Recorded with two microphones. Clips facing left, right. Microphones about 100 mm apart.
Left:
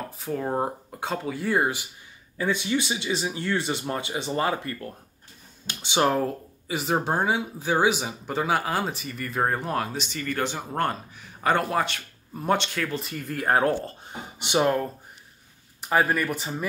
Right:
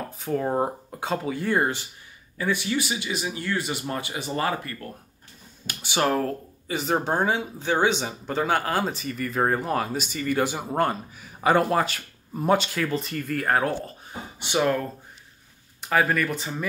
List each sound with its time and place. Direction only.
0.2 s speech: centre (ahead or behind)
2.3 s speech: 20° left (ahead or behind)
6.7 s speech: 5° left (ahead or behind)
13.2 s speech: 20° left (ahead or behind)
15.9 s speech: 5° left (ahead or behind)